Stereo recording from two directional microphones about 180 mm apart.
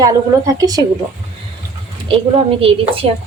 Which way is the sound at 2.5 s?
30° right (ahead or behind).